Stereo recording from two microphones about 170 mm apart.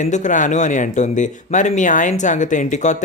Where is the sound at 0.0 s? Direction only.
45° left (ahead or behind).